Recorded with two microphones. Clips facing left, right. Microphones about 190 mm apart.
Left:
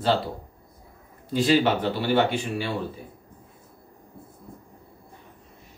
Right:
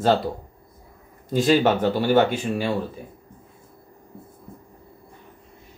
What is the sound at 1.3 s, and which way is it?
Speech, 45° right (ahead or behind).